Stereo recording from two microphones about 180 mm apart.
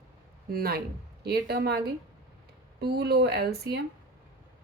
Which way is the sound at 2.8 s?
65° right (ahead or behind).